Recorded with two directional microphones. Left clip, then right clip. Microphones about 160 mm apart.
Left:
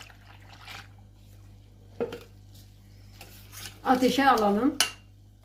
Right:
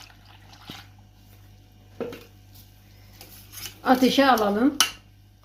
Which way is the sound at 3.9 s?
50° right (ahead or behind).